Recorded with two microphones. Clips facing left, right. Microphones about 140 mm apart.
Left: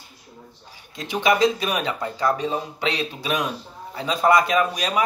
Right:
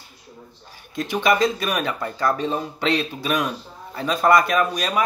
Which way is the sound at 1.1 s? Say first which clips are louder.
Left 1 dB; 20° left (ahead or behind).